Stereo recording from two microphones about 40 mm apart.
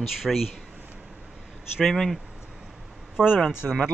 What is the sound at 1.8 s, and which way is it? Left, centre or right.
Speech, centre.